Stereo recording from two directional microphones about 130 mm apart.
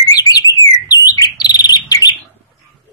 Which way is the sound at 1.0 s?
30° left (ahead or behind).